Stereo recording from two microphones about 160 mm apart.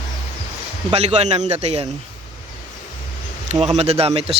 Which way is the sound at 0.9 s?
40° right (ahead or behind).